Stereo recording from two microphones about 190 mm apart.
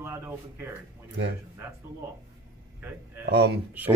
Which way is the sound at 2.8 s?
10° right (ahead or behind).